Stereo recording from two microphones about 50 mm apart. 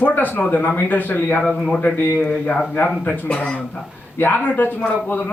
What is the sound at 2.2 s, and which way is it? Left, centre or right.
Speech, left.